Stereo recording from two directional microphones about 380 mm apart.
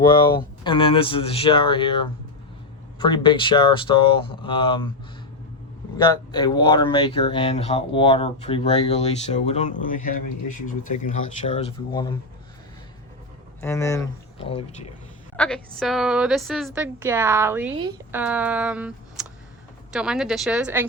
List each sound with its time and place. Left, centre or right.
0.3 s speech: centre
6.0 s speech: centre
10.2 s speech: left
11.0 s speech: centre
13.6 s speech: centre
15.4 s a woman's voice: centre